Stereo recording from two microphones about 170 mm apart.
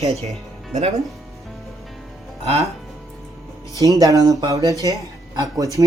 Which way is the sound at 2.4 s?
35° right (ahead or behind).